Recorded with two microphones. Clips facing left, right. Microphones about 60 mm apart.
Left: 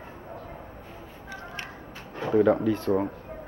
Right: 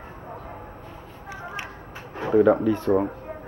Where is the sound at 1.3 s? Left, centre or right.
Centre.